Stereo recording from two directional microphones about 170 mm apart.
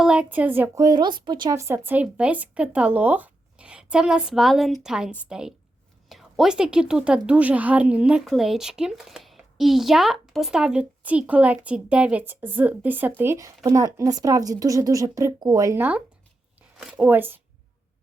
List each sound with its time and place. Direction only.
0.0 s a woman's voice: 5° right (ahead or behind)